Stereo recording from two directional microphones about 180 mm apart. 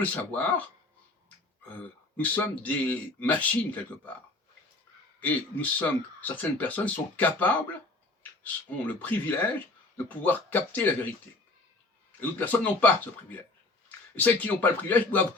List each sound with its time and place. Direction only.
0.0 s speech: 10° left (ahead or behind)
2.1 s speech: 10° left (ahead or behind)
5.2 s speech: 10° left (ahead or behind)
9.0 s speech: 10° left (ahead or behind)
12.2 s speech: 10° left (ahead or behind)